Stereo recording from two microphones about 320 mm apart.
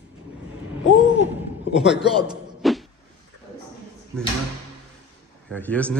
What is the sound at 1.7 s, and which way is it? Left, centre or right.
Speech, centre.